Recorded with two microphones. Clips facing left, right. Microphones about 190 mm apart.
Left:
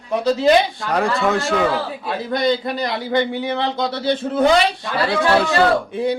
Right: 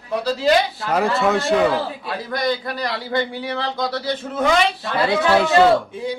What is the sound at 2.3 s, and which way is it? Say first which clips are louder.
A man's voice: left 4 dB; 20° left (ahead or behind).